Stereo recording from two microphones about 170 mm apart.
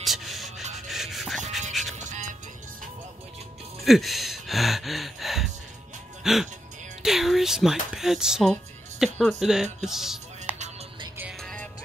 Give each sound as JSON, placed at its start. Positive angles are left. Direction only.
{"t": 0.0, "sound": "music", "side_deg": 0}
{"t": 0.7, "sound": "rub", "side_deg": 0}
{"t": 1.7, "sound": "music", "side_deg": 0}
{"t": 2.0, "sound": "music", "side_deg": -45}
{"t": 3.8, "sound": "gasp", "side_deg": 0}
{"t": 6.2, "sound": "speech", "side_deg": 0}
{"t": 11.4, "sound": "music", "side_deg": 10}